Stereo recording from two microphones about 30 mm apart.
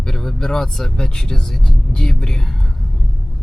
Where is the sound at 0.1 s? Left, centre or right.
Centre.